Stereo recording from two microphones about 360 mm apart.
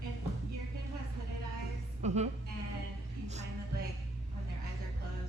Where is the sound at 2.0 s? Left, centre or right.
Centre.